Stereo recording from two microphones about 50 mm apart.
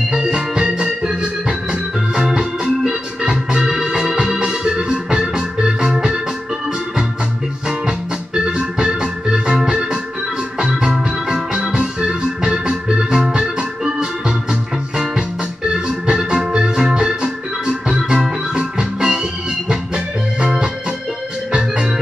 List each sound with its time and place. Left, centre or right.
0.1 s organ: centre
8.5 s music: centre
9.6 s organ: centre
10.6 s music: centre
20.3 s organ: centre